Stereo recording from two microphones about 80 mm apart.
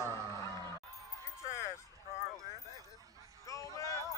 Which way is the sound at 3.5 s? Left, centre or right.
Left.